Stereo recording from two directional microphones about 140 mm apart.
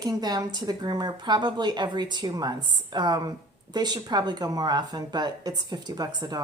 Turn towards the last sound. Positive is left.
turn(degrees=-25)  # may be behind; listen again after turning